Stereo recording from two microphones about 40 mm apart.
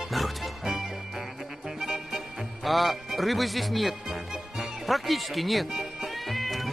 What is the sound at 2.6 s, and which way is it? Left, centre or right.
Speech, centre.